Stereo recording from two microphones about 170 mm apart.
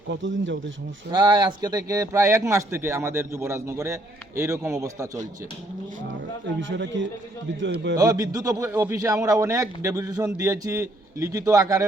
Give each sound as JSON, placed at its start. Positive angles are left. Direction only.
{"t": 0.1, "sound": "speech", "side_deg": -90}
{"t": 1.1, "sound": "speech", "side_deg": -25}
{"t": 6.6, "sound": "speech", "side_deg": -90}
{"t": 7.9, "sound": "a man's voice", "side_deg": -20}